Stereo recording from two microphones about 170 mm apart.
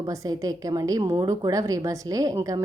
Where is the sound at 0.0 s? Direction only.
20° right (ahead or behind).